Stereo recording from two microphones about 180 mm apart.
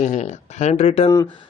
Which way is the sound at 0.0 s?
40° left (ahead or behind).